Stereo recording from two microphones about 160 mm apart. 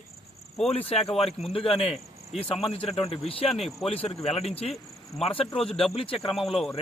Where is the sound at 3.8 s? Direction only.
40° left (ahead or behind).